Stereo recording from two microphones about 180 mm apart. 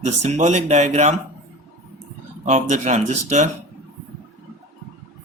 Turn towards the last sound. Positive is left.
turn(degrees=-40)  # may be behind; listen again after turning